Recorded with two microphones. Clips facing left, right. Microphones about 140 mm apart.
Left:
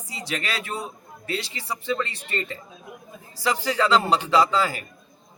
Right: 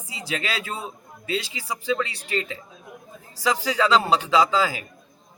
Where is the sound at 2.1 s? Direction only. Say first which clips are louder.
Right 3 dB; 90° right.